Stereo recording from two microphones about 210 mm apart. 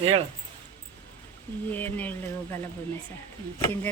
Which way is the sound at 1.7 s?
10° left (ahead or behind).